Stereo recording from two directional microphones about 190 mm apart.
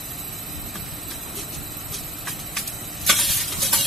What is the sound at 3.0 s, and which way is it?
Stir, centre (ahead or behind).